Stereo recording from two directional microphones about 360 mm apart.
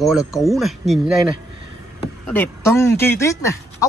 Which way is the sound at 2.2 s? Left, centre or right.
Centre.